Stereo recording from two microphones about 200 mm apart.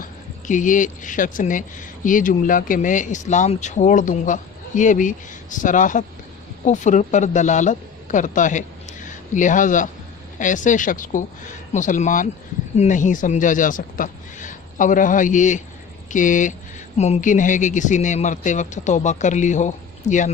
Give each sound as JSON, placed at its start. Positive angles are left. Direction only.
{"t": 0.0, "sound": "speech", "side_deg": 40}